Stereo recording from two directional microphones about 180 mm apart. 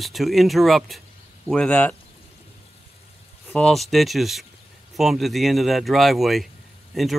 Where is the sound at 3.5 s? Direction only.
5° left (ahead or behind).